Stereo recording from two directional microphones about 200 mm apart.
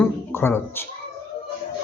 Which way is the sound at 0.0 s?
10° left (ahead or behind).